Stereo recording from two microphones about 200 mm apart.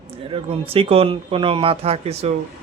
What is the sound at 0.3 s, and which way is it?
Speech, 30° right (ahead or behind).